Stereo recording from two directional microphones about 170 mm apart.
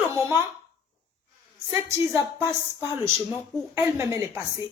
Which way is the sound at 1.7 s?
15° right (ahead or behind).